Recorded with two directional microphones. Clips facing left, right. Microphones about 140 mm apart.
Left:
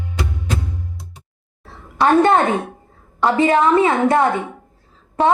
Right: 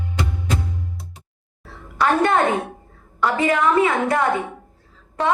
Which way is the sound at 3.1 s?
25° left (ahead or behind).